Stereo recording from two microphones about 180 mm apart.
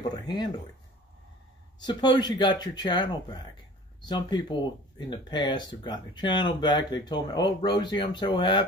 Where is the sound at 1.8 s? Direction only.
25° left (ahead or behind).